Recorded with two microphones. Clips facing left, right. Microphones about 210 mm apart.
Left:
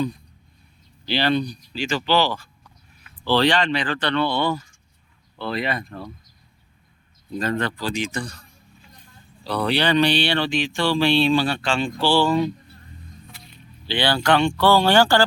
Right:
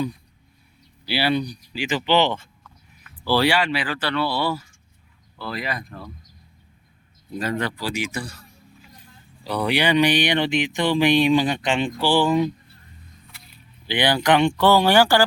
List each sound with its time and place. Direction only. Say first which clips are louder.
1.0 s speech: left 1 dB; 10° right (ahead or behind)
2.9 s speech: left 1 dB; 10° right (ahead or behind)
7.3 s speech: left 1 dB; 10° right (ahead or behind)
13.8 s speech: right 1 dB; 15° right (ahead or behind)